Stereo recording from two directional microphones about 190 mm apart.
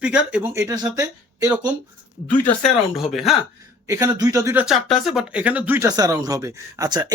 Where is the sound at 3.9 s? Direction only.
15° right (ahead or behind).